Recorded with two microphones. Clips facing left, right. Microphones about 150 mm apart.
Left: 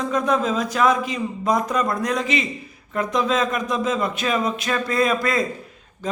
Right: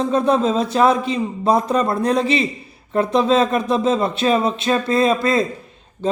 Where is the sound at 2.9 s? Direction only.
30° right (ahead or behind).